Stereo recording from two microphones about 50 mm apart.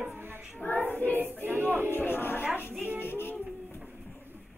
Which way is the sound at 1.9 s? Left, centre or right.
Left.